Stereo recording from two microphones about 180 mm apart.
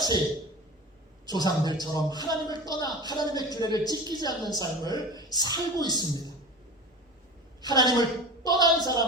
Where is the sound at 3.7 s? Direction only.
20° right (ahead or behind).